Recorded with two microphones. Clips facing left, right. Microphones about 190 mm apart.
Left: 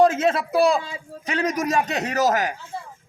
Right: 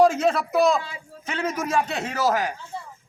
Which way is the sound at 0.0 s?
Centre (ahead or behind).